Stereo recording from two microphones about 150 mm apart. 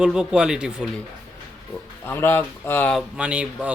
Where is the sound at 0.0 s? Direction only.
5° right (ahead or behind).